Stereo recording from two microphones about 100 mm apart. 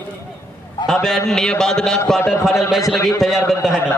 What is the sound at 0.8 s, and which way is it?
A man's voice, 5° left (ahead or behind).